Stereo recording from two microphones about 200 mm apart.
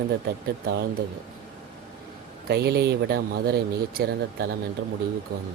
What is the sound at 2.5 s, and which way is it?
Speech, 55° right (ahead or behind).